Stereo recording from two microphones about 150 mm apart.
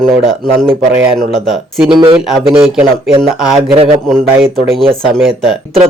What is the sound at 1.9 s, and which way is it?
Speech, 30° right (ahead or behind).